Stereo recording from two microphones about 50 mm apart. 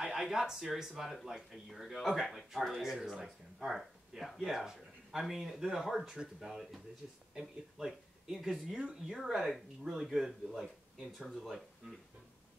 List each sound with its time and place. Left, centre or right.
0.0 s speech: centre
3.0 s speech: centre